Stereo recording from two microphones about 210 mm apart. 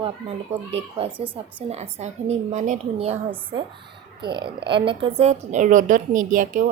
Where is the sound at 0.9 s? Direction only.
25° right (ahead or behind).